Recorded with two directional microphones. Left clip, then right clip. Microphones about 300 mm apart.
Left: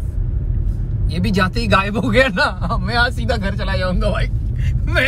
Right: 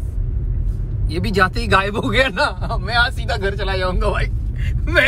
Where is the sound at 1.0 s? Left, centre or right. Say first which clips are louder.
Right 2 dB; centre.